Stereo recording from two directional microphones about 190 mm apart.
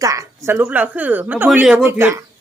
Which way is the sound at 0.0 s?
15° right (ahead or behind).